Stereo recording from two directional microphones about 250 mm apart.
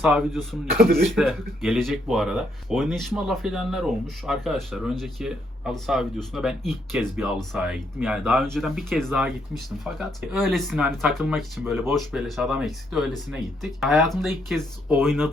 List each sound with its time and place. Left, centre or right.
0.0 s speech: centre
0.8 s speech: right
1.0 s speech: centre